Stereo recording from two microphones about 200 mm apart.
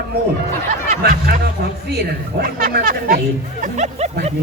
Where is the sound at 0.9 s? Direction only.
35° right (ahead or behind).